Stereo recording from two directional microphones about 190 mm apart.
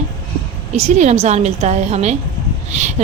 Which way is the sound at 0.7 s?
35° right (ahead or behind).